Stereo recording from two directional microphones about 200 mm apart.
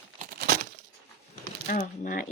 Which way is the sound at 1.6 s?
45° left (ahead or behind).